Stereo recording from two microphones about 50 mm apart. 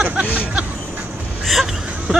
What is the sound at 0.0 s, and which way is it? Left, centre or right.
Hubbub, right.